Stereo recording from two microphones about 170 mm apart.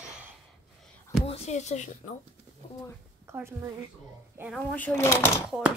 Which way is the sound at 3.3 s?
15° right (ahead or behind).